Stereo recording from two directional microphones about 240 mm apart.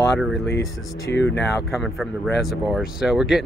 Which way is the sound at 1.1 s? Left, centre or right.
Left.